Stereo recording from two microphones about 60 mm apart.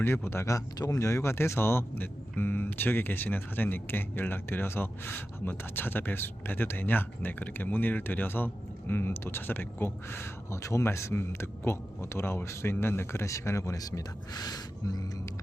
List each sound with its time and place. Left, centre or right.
0.0 s speech: left
0.9 s speech: left
11.1 s speech: left
13.2 s speech: left